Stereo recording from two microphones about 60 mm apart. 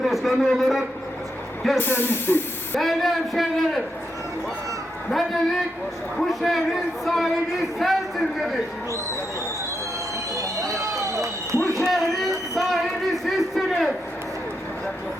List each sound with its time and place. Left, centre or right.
0.0 s a man's voice: centre
1.8 s speech: left
2.7 s a man's voice: centre
5.1 s a man's voice: centre
10.3 s a sound: right
11.8 s music: centre